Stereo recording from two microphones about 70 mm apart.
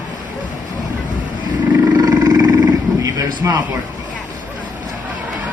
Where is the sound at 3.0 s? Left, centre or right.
Right.